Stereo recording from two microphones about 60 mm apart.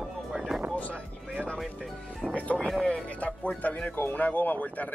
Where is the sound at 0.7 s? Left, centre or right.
Left.